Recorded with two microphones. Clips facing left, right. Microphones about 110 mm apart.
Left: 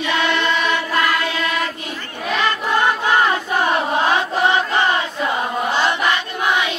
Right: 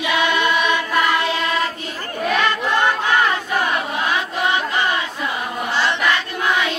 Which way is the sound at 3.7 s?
35° left (ahead or behind).